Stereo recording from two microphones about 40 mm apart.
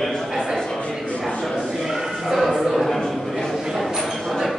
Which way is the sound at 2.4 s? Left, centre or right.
Centre.